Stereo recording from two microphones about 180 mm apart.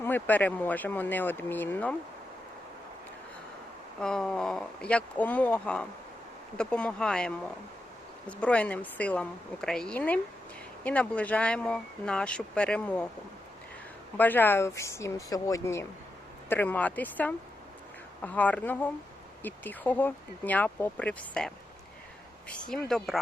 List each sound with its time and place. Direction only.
0.0 s speech: 10° left (ahead or behind)
4.0 s speech: 5° left (ahead or behind)
14.2 s speech: 10° left (ahead or behind)